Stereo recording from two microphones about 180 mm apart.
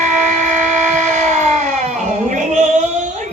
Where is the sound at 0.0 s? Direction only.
40° right (ahead or behind).